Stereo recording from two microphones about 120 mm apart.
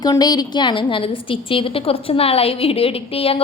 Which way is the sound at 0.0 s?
35° left (ahead or behind).